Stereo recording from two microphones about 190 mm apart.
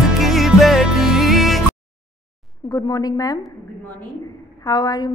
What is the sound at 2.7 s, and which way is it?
Speech, 20° left (ahead or behind).